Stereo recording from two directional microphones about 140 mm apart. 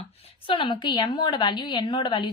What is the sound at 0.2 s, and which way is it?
A woman's voice, 40° left (ahead or behind).